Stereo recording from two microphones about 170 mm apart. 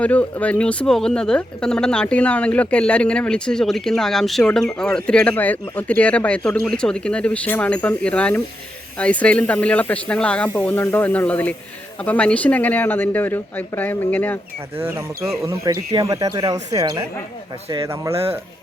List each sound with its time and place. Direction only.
0.0 s speech: 10° left (ahead or behind)
14.8 s speech: 15° right (ahead or behind)
18.1 s speech: 35° right (ahead or behind)